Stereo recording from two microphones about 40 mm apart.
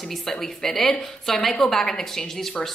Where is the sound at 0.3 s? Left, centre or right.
Centre.